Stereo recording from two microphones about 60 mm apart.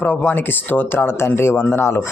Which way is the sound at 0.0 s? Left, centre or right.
Left.